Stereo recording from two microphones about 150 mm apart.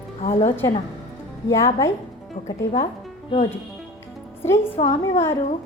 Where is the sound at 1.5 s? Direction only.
20° left (ahead or behind).